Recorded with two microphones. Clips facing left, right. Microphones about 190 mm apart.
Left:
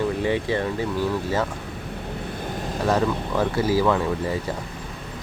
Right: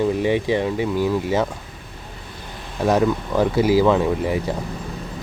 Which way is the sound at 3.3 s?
15° right (ahead or behind).